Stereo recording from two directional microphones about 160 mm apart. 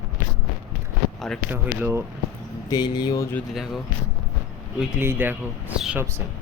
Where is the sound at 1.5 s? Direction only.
15° right (ahead or behind).